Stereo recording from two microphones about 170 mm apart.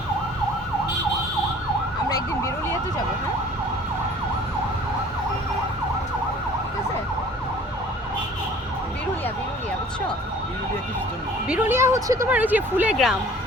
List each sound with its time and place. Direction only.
2.0 s emergency vehicle: 20° left (ahead or behind)
11.4 s a woman's voice: 10° right (ahead or behind)